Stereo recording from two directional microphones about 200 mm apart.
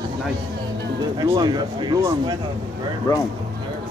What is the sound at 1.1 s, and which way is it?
Speech, 20° right (ahead or behind).